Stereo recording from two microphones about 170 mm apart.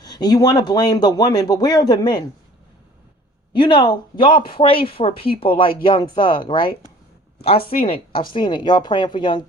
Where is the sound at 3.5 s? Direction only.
30° left (ahead or behind).